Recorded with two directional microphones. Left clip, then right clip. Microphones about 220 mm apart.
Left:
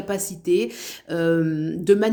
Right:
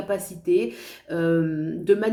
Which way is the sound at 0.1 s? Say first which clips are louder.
Left 1 dB; 50° left (ahead or behind).